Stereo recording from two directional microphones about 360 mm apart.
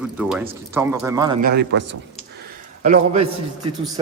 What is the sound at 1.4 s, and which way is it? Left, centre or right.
Speech, right.